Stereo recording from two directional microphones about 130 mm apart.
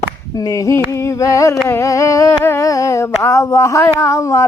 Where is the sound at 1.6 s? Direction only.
20° left (ahead or behind).